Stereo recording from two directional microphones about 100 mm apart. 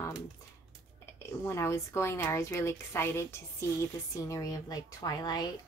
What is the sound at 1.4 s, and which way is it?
A woman's voice, 30° left (ahead or behind).